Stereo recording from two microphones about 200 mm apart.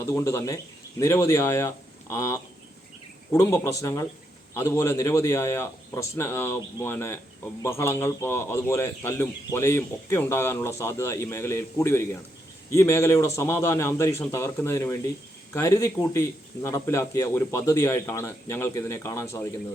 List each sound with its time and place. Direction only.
0.0 s a man's voice: 15° left (ahead or behind)